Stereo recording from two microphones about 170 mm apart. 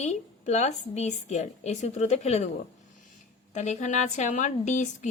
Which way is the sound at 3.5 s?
45° left (ahead or behind).